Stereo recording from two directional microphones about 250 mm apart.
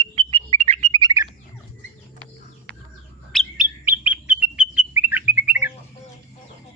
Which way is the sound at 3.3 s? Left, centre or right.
Centre.